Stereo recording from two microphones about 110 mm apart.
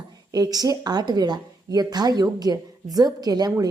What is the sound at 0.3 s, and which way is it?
A woman's voice, 35° right (ahead or behind).